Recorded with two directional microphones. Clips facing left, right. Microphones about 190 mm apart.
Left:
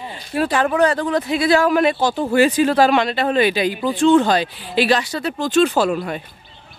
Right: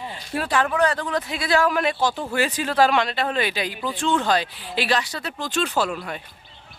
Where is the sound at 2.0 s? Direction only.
35° left (ahead or behind).